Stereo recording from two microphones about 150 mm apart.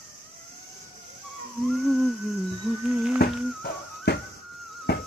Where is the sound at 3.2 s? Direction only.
90° left.